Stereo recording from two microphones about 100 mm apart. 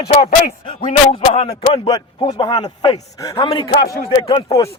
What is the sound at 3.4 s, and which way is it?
Speech, 60° left (ahead or behind).